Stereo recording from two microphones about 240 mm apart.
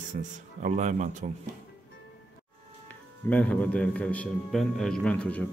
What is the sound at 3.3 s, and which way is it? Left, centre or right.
A man's voice, centre.